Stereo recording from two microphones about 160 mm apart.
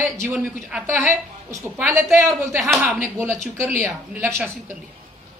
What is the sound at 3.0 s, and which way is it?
A woman's voice, 15° right (ahead or behind).